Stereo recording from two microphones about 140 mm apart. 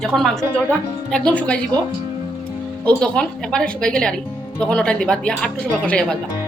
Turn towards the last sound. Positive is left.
turn(degrees=5)  # may be behind; listen again after turning